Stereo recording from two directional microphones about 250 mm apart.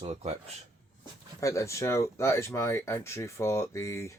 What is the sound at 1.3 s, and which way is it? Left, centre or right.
Speech, centre.